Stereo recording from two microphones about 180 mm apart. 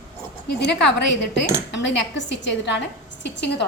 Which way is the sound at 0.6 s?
70° left (ahead or behind).